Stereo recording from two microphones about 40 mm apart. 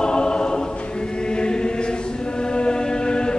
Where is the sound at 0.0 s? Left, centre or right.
Left.